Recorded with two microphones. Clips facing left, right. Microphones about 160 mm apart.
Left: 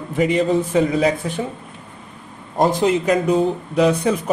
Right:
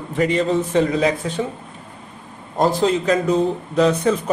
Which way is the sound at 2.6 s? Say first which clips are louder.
Left 1 dB; 15° left (ahead or behind).